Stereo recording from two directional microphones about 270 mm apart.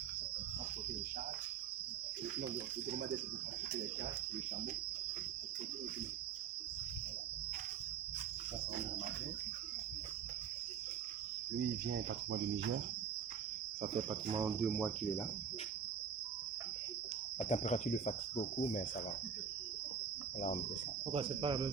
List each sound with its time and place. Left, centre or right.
11.9 s cricket: right
14.1 s speech: centre
14.6 s speech: centre
17.5 s speech: left
21.1 s speech: right